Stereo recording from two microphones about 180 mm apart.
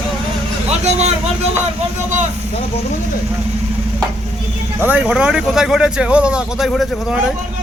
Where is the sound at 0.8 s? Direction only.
35° right (ahead or behind).